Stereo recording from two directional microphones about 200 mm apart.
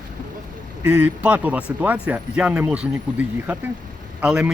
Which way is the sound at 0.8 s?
10° right (ahead or behind).